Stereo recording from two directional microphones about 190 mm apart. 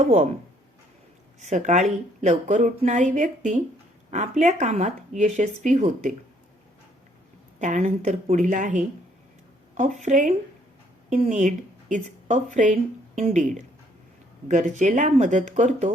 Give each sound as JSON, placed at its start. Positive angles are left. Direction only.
{"t": 1.4, "sound": "speech", "side_deg": -40}
{"t": 7.6, "sound": "speech", "side_deg": -40}